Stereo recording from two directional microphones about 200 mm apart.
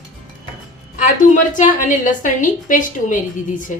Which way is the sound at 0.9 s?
40° left (ahead or behind).